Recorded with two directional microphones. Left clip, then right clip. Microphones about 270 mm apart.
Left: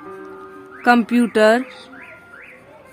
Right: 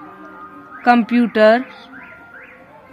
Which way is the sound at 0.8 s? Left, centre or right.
Centre.